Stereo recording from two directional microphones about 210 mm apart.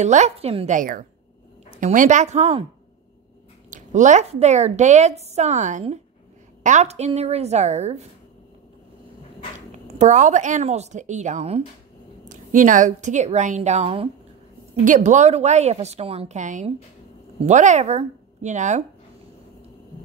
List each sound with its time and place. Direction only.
0.0 s a woman's voice: 35° right (ahead or behind)
3.7 s a woman's voice: 35° right (ahead or behind)
9.8 s a woman's voice: 35° right (ahead or behind)